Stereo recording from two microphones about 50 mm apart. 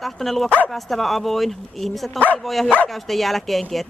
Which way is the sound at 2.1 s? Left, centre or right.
Left.